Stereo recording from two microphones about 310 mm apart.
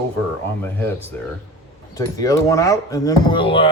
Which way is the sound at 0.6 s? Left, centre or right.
Centre.